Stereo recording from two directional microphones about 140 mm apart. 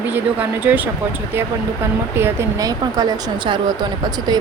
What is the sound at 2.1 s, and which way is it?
A woman's voice, 20° right (ahead or behind).